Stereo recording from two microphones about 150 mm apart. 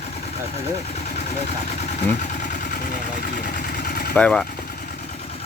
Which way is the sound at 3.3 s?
75° left (ahead or behind).